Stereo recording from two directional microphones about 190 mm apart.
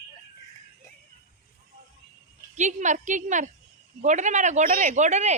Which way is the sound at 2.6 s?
40° right (ahead or behind).